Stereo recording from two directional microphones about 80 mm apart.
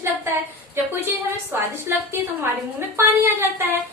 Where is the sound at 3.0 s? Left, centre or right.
Right.